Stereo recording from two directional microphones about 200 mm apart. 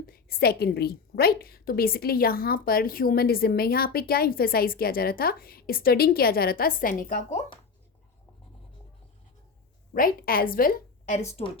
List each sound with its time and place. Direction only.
0.0 s a woman's voice: 50° left (ahead or behind)
9.9 s a woman's voice: 45° left (ahead or behind)